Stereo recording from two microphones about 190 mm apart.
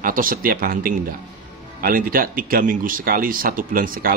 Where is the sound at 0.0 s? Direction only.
45° right (ahead or behind).